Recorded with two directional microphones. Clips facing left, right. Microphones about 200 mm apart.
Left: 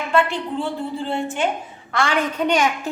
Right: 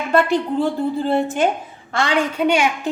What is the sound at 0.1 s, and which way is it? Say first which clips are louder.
A woman's voice: right 4 dB; 40° right (ahead or behind).